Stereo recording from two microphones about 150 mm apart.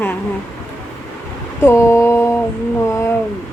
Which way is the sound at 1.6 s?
15° left (ahead or behind).